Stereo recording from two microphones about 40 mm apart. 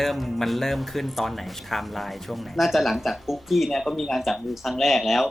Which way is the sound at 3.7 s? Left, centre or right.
Centre.